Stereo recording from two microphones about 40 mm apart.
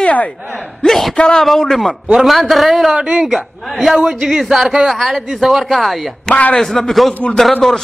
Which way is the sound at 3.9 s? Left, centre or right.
Centre.